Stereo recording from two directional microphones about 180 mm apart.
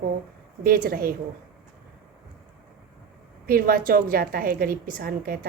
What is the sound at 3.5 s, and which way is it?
A woman's voice, 55° right (ahead or behind).